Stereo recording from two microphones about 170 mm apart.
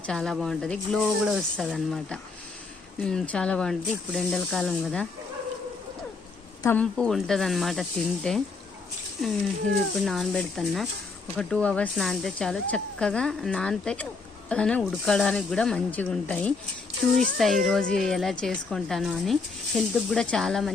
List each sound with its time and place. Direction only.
0.0 s speech: 5° left (ahead or behind)
6.6 s speech: 15° left (ahead or behind)
6.9 s speech: centre (ahead or behind)
10.0 s speech: centre (ahead or behind)